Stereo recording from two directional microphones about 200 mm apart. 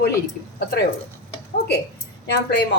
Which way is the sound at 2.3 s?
55° left (ahead or behind).